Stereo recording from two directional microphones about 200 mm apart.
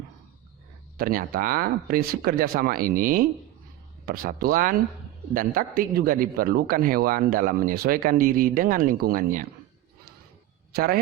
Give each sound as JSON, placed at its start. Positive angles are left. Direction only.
{"t": 0.9, "sound": "a man's voice", "side_deg": -45}
{"t": 10.8, "sound": "a man's voice", "side_deg": -50}